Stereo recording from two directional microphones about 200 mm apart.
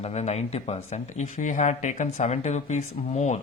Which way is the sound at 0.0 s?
35° left (ahead or behind).